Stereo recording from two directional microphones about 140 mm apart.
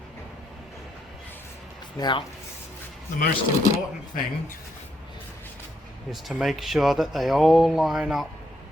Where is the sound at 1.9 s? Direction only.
30° left (ahead or behind).